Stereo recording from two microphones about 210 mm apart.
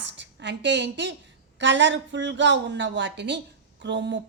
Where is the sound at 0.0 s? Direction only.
60° right (ahead or behind).